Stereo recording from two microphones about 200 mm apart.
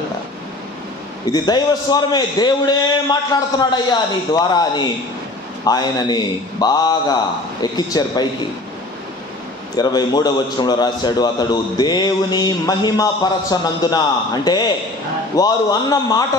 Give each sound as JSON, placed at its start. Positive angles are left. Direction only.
{"t": 1.3, "sound": "a man's voice", "side_deg": 20}
{"t": 9.8, "sound": "a man's voice", "side_deg": 20}